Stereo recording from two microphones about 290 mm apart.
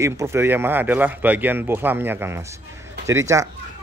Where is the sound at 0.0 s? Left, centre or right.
Centre.